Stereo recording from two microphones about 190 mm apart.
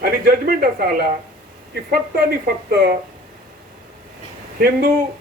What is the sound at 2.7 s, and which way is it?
Speech, 55° right (ahead or behind).